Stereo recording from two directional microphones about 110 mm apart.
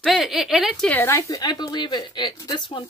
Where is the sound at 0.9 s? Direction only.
25° left (ahead or behind); by 2.8 s 45° left (ahead or behind).